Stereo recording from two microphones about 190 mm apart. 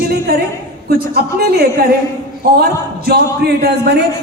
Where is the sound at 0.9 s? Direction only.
55° right (ahead or behind).